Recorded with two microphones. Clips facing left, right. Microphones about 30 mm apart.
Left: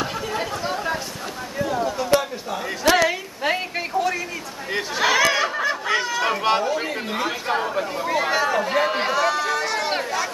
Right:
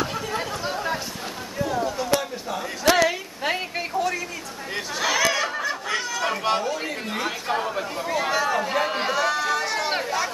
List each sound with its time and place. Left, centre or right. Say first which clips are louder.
0.0 s chatter: left 1 dB; centre
1.6 s a sound: left 2 dB; centre
4.7 s chatter: left 4 dB; centre
5.6 s speech: left 4 dB; centre